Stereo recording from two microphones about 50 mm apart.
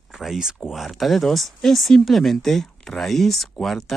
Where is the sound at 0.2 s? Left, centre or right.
Centre.